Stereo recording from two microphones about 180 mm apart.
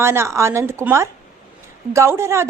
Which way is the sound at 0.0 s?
15° right (ahead or behind).